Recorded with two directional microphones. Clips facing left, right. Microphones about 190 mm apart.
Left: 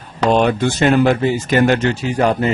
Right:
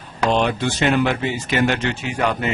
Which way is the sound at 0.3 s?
45° left (ahead or behind).